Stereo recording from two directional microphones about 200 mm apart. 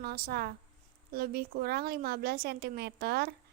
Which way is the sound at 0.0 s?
50° right (ahead or behind).